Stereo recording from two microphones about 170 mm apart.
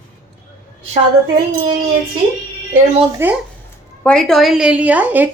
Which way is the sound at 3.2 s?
15° right (ahead or behind).